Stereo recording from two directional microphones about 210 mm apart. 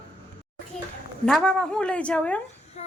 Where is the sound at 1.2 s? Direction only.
5° left (ahead or behind).